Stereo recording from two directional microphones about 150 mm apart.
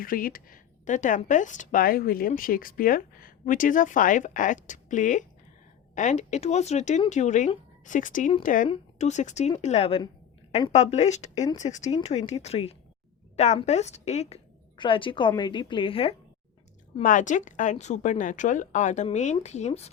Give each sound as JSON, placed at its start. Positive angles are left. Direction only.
{"t": 0.0, "sound": "a woman's voice", "side_deg": 75}
{"t": 17.0, "sound": "speech", "side_deg": 60}